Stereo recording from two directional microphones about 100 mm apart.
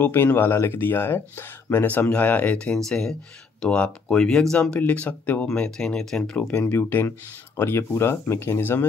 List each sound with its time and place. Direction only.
0.0 s speech: 20° left (ahead or behind)
4.7 s speech: 15° left (ahead or behind)